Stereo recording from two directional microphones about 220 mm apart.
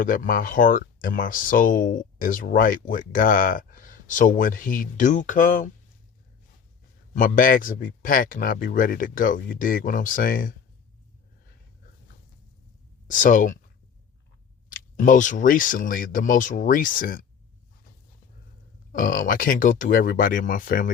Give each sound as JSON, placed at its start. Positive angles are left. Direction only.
{"t": 0.0, "sound": "speech", "side_deg": 40}
{"t": 7.2, "sound": "speech", "side_deg": 40}
{"t": 13.1, "sound": "speech", "side_deg": 35}
{"t": 14.7, "sound": "speech", "side_deg": 35}
{"t": 18.9, "sound": "speech", "side_deg": 40}